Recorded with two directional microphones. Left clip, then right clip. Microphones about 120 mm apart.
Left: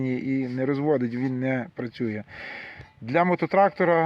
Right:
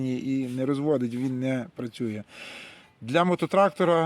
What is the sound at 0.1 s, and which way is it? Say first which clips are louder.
Speech: left 2 dB; 50° right (ahead or behind).